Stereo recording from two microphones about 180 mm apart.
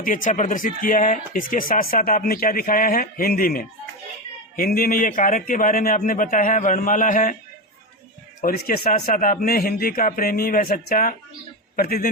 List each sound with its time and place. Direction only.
0.0 s speech: 45° left (ahead or behind)
8.4 s a man's voice: 55° left (ahead or behind)